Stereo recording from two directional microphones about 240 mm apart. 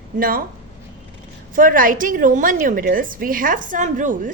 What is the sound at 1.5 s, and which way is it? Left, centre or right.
A woman's voice, right.